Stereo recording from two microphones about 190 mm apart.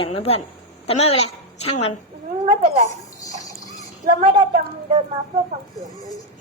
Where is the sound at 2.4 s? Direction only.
35° right (ahead or behind).